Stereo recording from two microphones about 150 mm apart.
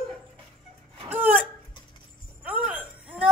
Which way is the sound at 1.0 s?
10° right (ahead or behind).